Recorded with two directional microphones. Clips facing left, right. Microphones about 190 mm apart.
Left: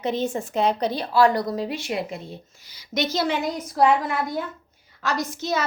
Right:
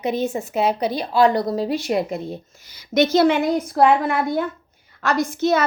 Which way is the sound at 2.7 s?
50° right (ahead or behind).